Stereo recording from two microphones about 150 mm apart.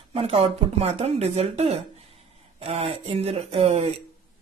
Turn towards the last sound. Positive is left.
turn(degrees=-45)  # may be behind; listen again after turning